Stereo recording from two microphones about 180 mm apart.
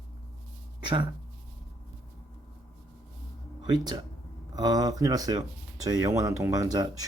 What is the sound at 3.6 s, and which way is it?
Speech, 25° right (ahead or behind).